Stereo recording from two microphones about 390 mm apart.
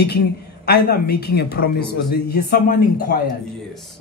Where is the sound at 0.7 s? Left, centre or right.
Left.